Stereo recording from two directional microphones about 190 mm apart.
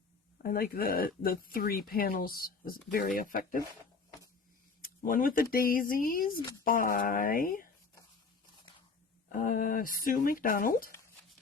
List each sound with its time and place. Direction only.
0.4 s speech: 50° left (ahead or behind)
5.0 s speech: 45° left (ahead or behind)
9.3 s speech: 50° left (ahead or behind)